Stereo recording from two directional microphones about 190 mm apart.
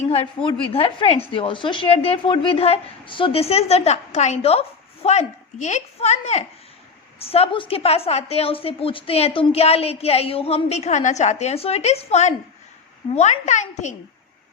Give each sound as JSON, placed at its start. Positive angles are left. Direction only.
{"t": 0.1, "sound": "a woman's voice", "side_deg": 30}